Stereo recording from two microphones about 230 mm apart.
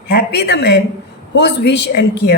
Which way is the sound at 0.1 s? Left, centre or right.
Left.